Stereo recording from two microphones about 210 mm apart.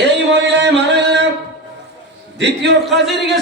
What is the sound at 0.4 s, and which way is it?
Music, 55° right (ahead or behind).